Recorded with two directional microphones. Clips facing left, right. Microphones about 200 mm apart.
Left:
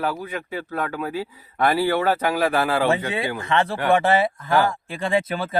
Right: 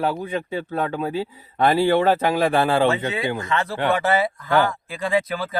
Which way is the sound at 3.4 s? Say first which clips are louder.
Left 1 dB; 30° left (ahead or behind).